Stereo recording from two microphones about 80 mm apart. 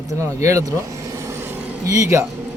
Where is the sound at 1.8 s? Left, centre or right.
Right.